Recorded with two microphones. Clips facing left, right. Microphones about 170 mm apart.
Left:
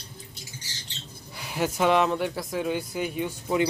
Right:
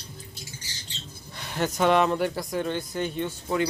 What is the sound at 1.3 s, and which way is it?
Speech, 10° left (ahead or behind).